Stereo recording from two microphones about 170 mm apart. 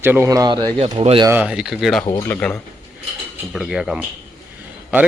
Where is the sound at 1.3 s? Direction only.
5° right (ahead or behind).